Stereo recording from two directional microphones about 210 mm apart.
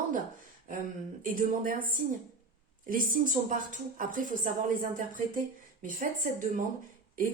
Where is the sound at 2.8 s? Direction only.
40° right (ahead or behind).